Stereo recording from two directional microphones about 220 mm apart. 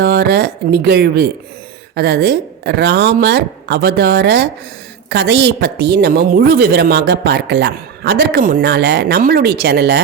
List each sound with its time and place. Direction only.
0.0 s a woman's voice: 45° right (ahead or behind)